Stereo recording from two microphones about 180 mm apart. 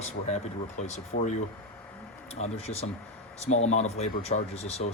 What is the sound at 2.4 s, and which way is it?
Speech, 35° left (ahead or behind).